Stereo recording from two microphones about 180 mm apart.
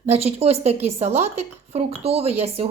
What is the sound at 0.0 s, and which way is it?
Speech, 35° right (ahead or behind).